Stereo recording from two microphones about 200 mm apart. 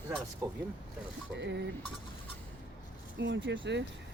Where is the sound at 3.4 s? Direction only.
65° right (ahead or behind).